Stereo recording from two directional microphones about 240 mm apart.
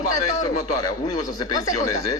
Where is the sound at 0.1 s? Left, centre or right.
Left.